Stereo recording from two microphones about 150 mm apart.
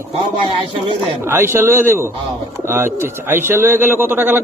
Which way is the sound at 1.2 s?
15° right (ahead or behind).